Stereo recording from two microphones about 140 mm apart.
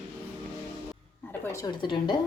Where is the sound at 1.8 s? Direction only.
35° left (ahead or behind).